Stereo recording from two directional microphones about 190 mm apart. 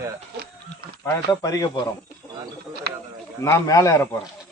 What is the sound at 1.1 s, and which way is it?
Speech, 15° left (ahead or behind).